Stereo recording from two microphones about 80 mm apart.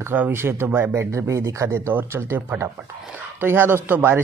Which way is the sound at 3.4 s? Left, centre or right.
Right.